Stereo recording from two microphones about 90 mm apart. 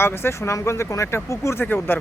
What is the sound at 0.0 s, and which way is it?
Speech, 25° left (ahead or behind).